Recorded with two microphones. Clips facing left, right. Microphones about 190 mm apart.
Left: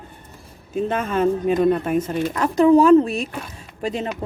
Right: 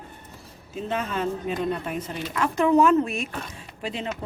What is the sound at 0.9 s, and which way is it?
Speech, 50° left (ahead or behind).